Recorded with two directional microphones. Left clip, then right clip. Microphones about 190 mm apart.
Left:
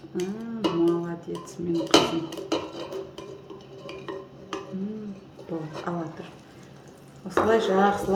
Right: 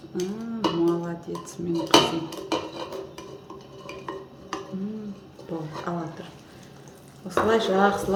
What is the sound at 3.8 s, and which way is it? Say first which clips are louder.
Stir: right 1 dB; 20° left (ahead or behind).